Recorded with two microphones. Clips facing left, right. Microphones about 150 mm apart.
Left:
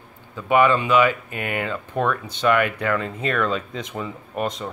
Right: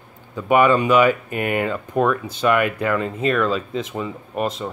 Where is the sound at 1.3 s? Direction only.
35° right (ahead or behind).